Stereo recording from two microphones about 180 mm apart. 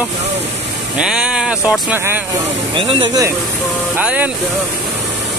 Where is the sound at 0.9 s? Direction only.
5° right (ahead or behind).